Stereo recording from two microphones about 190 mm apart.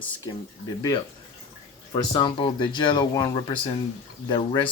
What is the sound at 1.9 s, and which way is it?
Speech, 25° left (ahead or behind).